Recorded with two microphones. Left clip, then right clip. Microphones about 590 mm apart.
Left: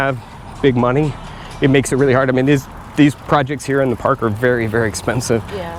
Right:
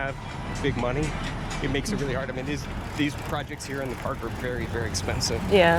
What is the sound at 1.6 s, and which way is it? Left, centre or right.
Speech, left.